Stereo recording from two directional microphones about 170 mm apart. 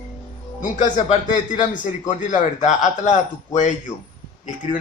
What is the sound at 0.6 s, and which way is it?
A man's voice, 50° left (ahead or behind).